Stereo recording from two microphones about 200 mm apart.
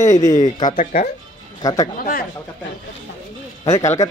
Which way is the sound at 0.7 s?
45° left (ahead or behind).